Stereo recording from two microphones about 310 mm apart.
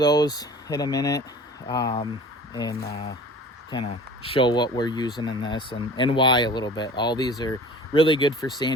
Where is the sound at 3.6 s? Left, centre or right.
Centre.